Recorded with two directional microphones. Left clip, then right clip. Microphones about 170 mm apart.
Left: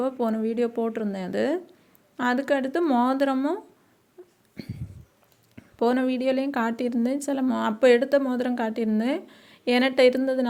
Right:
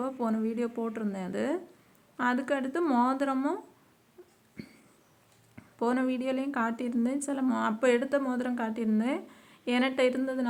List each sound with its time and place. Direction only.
0.0 s speech: 25° left (ahead or behind)
4.2 s wail: 30° left (ahead or behind)
4.6 s a sound: 25° left (ahead or behind)
5.5 s a woman's voice: 30° left (ahead or behind)